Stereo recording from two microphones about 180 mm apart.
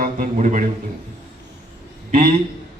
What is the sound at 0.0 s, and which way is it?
Speech, 45° right (ahead or behind).